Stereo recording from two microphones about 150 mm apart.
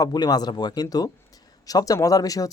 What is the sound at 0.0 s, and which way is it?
Speech, 25° left (ahead or behind).